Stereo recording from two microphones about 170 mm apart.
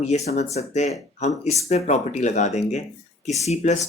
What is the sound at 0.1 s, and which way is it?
Speech, 40° left (ahead or behind).